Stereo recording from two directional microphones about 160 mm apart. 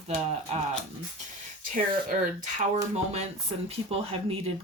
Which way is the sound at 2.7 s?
40° right (ahead or behind).